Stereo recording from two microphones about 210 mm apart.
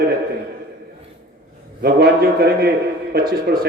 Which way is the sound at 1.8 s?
50° right (ahead or behind).